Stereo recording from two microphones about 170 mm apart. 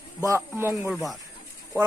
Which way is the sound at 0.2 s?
15° right (ahead or behind).